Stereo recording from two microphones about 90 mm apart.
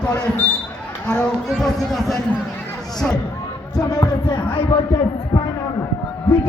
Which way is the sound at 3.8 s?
40° left (ahead or behind).